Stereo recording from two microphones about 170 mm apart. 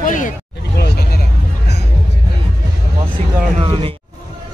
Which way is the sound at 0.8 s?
75° left (ahead or behind).